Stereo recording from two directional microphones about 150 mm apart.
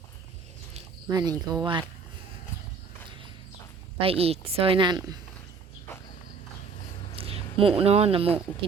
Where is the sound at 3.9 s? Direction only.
40° right (ahead or behind).